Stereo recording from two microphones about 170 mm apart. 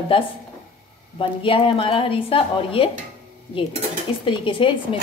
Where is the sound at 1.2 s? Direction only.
30° left (ahead or behind).